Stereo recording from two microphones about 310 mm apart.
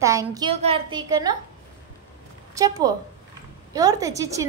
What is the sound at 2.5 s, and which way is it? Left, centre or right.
A woman's voice, centre.